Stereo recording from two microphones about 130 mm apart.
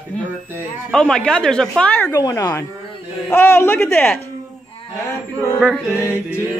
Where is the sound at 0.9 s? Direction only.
5° left (ahead or behind).